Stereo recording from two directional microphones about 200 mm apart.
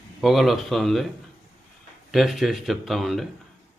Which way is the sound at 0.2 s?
Centre (ahead or behind).